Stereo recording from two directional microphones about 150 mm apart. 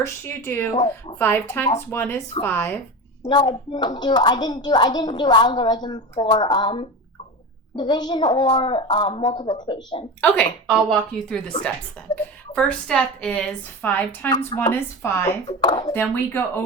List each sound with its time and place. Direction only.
0.0 s speech: 15° left (ahead or behind)
3.2 s speech: 30° left (ahead or behind)
10.7 s a woman's voice: centre (ahead or behind)
14.3 s speech: 25° left (ahead or behind)
15.4 s speech: 30° left (ahead or behind)
15.9 s speech: 15° left (ahead or behind)